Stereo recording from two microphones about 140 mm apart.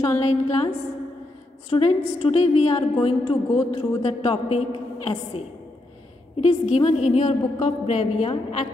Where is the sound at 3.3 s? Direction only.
45° left (ahead or behind).